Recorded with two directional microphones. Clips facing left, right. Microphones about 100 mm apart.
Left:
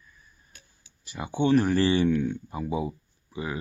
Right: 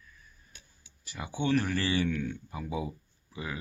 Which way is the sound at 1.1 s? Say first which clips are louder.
Left 6 dB; 30° left (ahead or behind).